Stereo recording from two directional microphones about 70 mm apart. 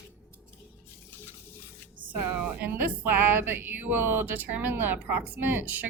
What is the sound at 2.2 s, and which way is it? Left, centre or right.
Speech, right.